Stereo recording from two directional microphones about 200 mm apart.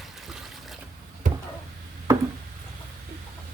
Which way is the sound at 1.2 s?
40° right (ahead or behind).